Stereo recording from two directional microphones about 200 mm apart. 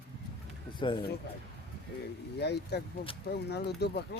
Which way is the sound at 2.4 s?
55° left (ahead or behind).